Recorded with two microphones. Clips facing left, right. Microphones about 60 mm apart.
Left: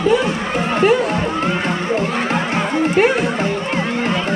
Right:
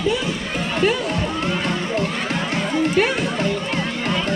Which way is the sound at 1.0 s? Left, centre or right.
Left.